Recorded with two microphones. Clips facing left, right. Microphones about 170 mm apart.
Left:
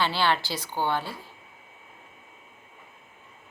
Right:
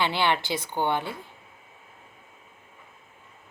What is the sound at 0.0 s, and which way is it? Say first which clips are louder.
Speech: even; 20° right (ahead or behind).